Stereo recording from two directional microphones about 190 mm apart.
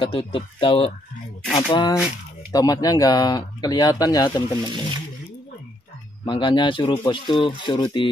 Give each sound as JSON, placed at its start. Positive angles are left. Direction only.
{"t": 0.0, "sound": "speech", "side_deg": 25}
{"t": 6.2, "sound": "speech", "side_deg": 25}